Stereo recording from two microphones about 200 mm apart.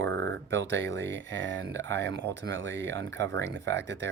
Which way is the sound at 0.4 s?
65° right (ahead or behind).